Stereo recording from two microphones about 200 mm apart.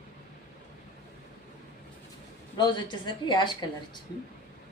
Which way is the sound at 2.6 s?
20° left (ahead or behind).